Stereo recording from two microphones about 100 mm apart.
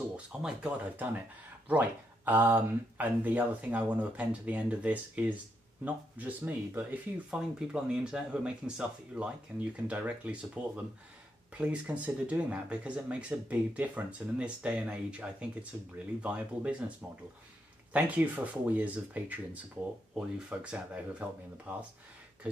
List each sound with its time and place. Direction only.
0.4 s speech: 10° right (ahead or behind)
7.2 s speech: 10° right (ahead or behind)
17.9 s speech: 15° right (ahead or behind)